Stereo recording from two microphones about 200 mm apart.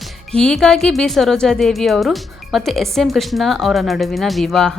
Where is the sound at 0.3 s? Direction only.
5° left (ahead or behind).